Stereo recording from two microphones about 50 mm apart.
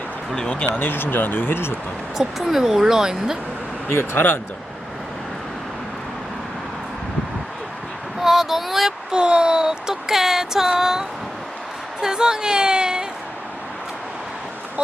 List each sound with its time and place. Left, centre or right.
0.6 s speech: left
2.1 s a sound: centre
3.8 s speech: left
8.2 s speech: centre
9.1 s a sound: centre
11.9 s a woman's voice: centre